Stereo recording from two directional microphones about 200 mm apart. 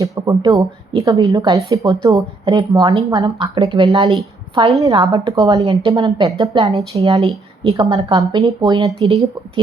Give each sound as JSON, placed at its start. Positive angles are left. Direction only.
{"t": 0.0, "sound": "speech", "side_deg": -20}